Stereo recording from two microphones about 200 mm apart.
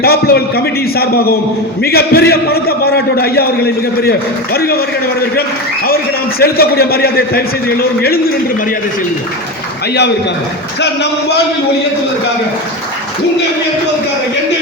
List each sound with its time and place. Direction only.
0.0 s a man's voice: 50° left (ahead or behind)
6.4 s a man's voice: 50° left (ahead or behind)